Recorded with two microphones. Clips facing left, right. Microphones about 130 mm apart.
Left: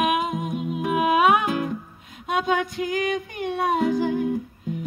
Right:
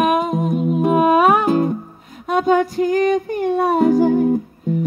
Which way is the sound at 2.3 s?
45° right (ahead or behind).